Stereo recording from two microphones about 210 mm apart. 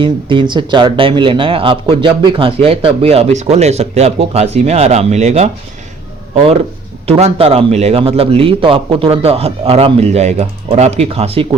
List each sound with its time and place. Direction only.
0.0 s speech: 25° right (ahead or behind)
7.1 s speech: 30° right (ahead or behind)